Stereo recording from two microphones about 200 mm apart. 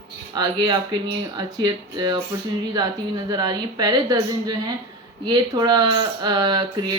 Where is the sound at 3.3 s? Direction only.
20° right (ahead or behind).